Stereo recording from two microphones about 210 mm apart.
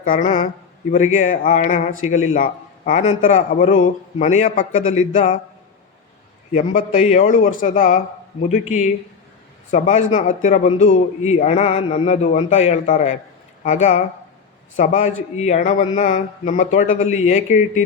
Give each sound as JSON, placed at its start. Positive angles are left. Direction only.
{"t": 0.0, "sound": "a man's voice", "side_deg": 40}
{"t": 6.5, "sound": "a man's voice", "side_deg": 35}